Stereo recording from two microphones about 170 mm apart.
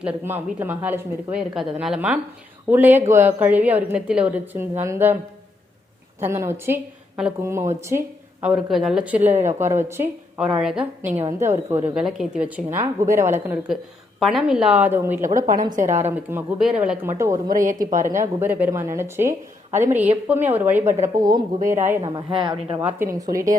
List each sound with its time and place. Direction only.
0.0 s a woman's voice: 10° right (ahead or behind)
6.1 s a woman's voice: 15° right (ahead or behind)
11.2 s a woman's voice: 15° right (ahead or behind)
14.2 s a woman's voice: centre (ahead or behind)
15.2 s a woman's voice: 50° right (ahead or behind)
16.6 s a woman's voice: 5° right (ahead or behind)
17.5 s a woman's voice: 50° right (ahead or behind)
18.0 s a woman's voice: 15° right (ahead or behind)
21.0 s speech: 20° right (ahead or behind)
22.8 s a woman's voice: 10° right (ahead or behind)